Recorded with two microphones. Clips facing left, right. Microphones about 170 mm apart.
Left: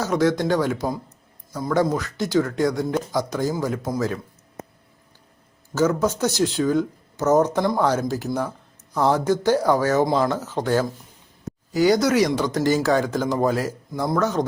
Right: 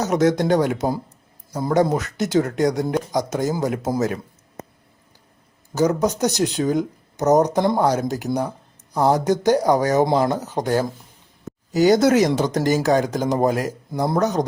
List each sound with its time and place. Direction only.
0.0 s speech: 20° right (ahead or behind)
5.7 s speech: 15° right (ahead or behind)
11.9 s speech: 50° right (ahead or behind)
12.8 s speech: 15° right (ahead or behind)